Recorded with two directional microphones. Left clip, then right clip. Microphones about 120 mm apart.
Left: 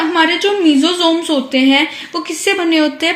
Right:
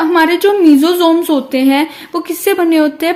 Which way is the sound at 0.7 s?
90° right.